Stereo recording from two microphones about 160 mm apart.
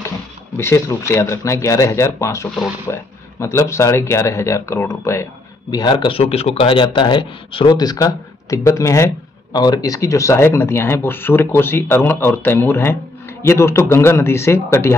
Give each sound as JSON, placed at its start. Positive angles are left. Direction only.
{"t": 0.6, "sound": "a man's voice", "side_deg": 15}